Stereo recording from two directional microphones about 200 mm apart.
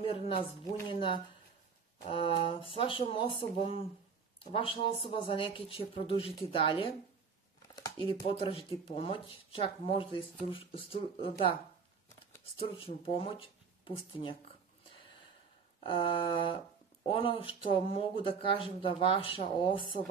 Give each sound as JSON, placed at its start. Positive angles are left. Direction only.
{"t": 0.0, "sound": "speech", "side_deg": 30}
{"t": 12.5, "sound": "speech", "side_deg": 30}
{"t": 15.8, "sound": "speech", "side_deg": 25}